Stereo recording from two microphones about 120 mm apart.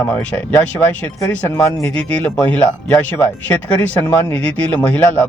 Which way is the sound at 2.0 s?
10° left (ahead or behind).